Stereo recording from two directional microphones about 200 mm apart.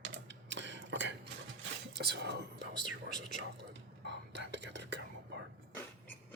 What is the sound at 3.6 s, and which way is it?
Whispering, 60° right (ahead or behind).